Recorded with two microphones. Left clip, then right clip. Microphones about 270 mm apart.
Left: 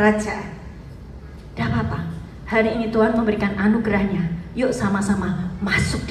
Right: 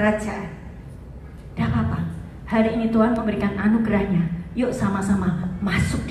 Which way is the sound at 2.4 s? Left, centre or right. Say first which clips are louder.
Left 2 dB; left.